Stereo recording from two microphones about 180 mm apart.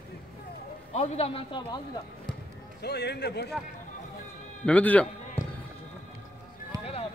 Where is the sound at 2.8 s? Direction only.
65° left (ahead or behind).